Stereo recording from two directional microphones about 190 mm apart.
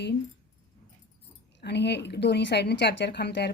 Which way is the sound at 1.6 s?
65° left (ahead or behind).